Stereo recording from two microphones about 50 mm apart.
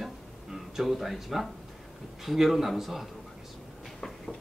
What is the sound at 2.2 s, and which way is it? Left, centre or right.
Speech, centre.